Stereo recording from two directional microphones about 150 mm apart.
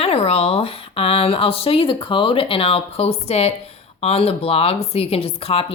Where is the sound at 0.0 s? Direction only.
40° left (ahead or behind).